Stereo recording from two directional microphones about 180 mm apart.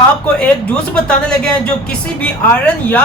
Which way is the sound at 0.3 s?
5° left (ahead or behind).